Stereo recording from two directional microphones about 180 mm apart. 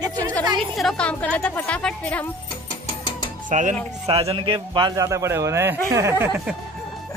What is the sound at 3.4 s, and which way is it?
Speech, 45° right (ahead or behind).